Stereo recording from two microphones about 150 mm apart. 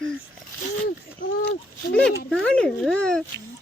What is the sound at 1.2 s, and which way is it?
Speech, 65° left (ahead or behind).